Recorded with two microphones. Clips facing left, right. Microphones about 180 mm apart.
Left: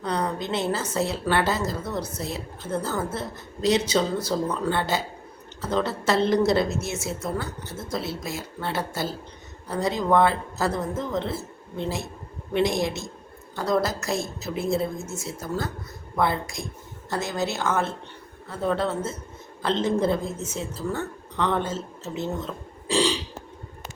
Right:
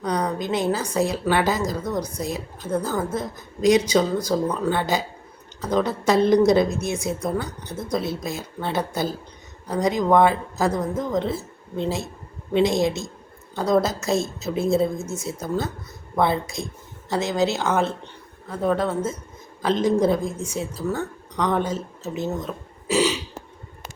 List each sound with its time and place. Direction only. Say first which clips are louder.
0.0 s a woman's voice: right 3 dB; 15° right (ahead or behind)
14.9 s speech: right 4 dB; centre (ahead or behind)
15.2 s speech: right 3 dB; 20° right (ahead or behind)